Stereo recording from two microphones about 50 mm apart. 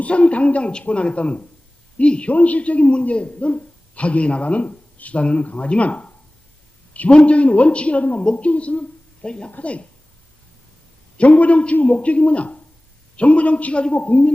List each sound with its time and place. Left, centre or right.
0.0 s a man's voice: left
11.2 s a man's voice: left